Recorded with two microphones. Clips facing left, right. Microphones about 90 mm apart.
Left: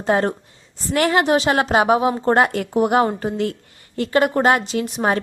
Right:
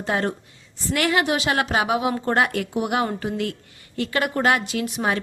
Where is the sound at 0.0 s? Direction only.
35° left (ahead or behind).